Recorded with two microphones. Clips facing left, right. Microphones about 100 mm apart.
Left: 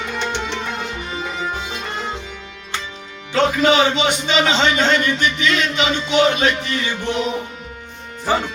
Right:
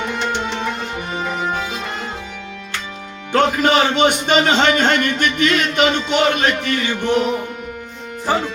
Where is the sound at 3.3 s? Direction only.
50° right (ahead or behind).